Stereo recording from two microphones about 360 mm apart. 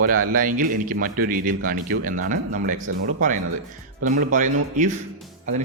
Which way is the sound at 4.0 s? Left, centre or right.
Right.